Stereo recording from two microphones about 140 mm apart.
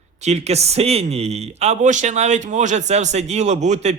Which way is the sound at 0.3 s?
50° right (ahead or behind).